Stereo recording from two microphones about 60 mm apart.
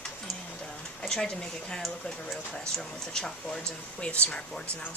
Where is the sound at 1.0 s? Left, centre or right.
Centre.